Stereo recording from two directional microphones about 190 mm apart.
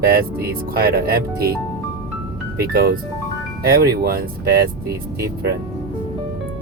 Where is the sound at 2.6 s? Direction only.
50° right (ahead or behind).